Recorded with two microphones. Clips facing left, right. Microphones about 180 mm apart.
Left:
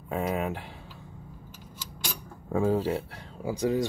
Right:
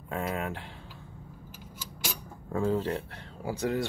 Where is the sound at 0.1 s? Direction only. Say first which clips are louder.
Left 4 dB; 10° left (ahead or behind).